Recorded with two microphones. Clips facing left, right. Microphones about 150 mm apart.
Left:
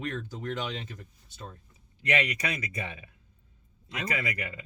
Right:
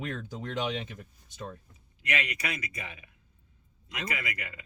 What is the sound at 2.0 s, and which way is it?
Speech, 30° left (ahead or behind).